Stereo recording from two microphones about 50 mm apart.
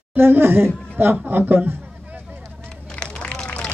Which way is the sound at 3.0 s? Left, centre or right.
Left.